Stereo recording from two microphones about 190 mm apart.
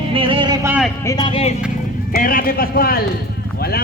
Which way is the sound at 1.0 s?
20° left (ahead or behind).